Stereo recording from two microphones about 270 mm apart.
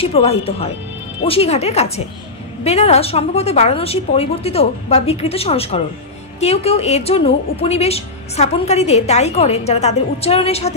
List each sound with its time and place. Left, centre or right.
0.0 s a woman's voice: left